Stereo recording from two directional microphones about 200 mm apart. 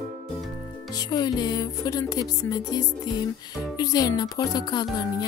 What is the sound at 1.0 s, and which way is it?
Music, 20° left (ahead or behind).